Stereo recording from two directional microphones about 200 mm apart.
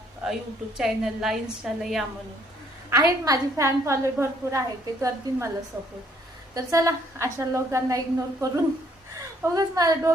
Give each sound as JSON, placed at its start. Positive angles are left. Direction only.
{"t": 0.2, "sound": "a woman's voice", "side_deg": -5}
{"t": 2.9, "sound": "a woman's voice", "side_deg": -15}
{"t": 6.5, "sound": "a woman's voice", "side_deg": -15}
{"t": 9.6, "sound": "a woman's voice", "side_deg": -20}